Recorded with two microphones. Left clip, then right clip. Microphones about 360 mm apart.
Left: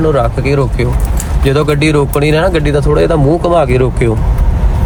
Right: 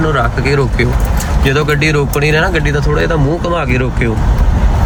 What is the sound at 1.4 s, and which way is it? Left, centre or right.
Speech, centre.